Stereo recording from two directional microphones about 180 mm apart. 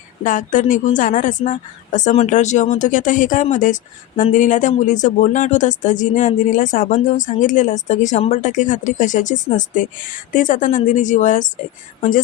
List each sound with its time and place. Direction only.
0.3 s speech: 45° left (ahead or behind)